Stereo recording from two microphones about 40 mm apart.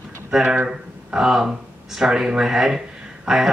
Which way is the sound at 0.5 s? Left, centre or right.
Centre.